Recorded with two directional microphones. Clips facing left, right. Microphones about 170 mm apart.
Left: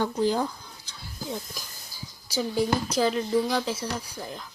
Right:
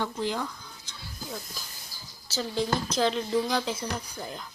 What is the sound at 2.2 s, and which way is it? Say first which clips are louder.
Speech: left 4 dB; 10° left (ahead or behind).